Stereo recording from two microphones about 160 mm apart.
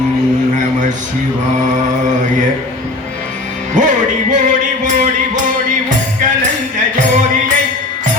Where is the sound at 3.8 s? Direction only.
50° right (ahead or behind).